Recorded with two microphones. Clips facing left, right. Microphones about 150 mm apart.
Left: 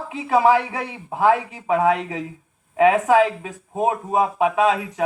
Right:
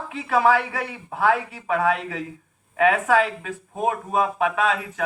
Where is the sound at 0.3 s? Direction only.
20° left (ahead or behind).